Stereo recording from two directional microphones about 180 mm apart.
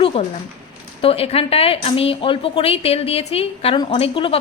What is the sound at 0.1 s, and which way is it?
Speech, 30° left (ahead or behind).